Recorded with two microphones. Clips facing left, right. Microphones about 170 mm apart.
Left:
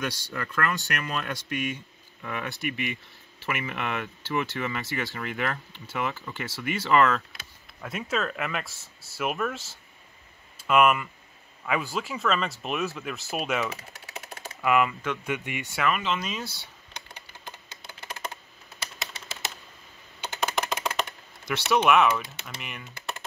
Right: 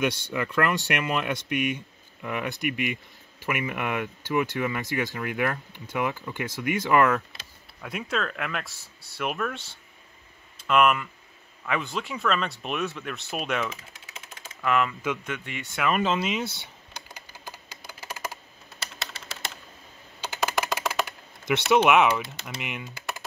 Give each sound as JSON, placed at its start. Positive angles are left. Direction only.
{"t": 0.2, "sound": "speech", "side_deg": -20}
{"t": 7.8, "sound": "speech", "side_deg": 0}
{"t": 15.9, "sound": "speech", "side_deg": -40}
{"t": 16.2, "sound": "speech", "side_deg": -20}
{"t": 17.1, "sound": "typing", "side_deg": -5}
{"t": 20.4, "sound": "typing", "side_deg": -10}
{"t": 21.5, "sound": "speech", "side_deg": -20}